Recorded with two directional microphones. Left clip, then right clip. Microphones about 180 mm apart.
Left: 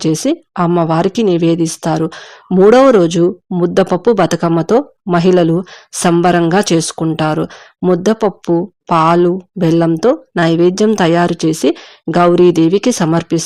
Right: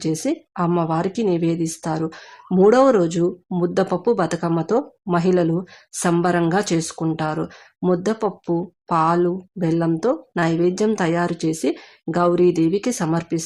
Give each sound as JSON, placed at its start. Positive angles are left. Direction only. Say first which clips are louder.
{"t": 0.0, "sound": "speech", "louder": "left 8 dB", "side_deg": 35}